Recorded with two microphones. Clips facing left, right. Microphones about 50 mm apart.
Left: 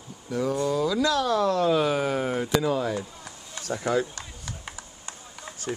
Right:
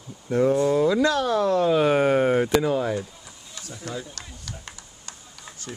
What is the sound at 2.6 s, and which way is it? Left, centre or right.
Speech, centre.